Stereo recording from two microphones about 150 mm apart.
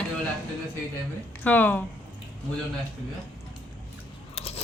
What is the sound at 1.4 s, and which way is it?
Speech, 10° left (ahead or behind).